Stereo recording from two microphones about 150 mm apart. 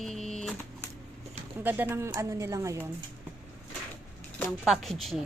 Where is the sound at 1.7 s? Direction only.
15° right (ahead or behind).